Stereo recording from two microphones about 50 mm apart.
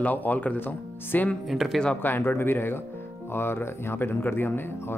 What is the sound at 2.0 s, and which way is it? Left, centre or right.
Speech, left.